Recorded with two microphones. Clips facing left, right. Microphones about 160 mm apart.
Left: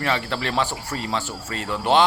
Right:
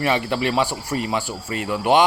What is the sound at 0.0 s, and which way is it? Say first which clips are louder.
Speech: right 4 dB; 15° right (ahead or behind).